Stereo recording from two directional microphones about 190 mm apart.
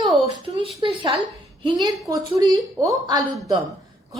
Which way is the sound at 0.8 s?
25° right (ahead or behind).